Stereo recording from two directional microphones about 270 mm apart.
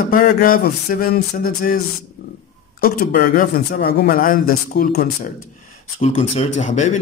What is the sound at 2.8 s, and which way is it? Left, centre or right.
Speech, left.